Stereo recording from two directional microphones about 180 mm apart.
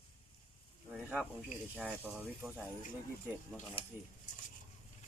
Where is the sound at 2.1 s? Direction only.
5° right (ahead or behind).